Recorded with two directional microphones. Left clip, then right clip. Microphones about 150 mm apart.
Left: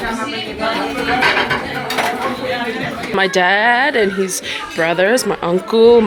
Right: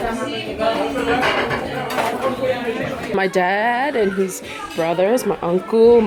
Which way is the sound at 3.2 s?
15° right (ahead or behind).